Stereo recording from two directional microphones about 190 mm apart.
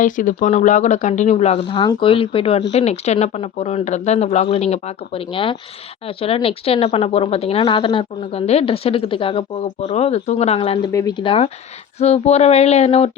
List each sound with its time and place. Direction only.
0.0 s a woman's voice: 45° left (ahead or behind)